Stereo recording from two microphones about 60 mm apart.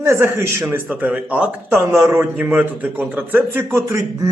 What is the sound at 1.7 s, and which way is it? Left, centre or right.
Speech, right.